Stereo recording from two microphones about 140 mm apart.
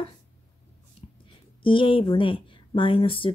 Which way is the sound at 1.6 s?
40° left (ahead or behind).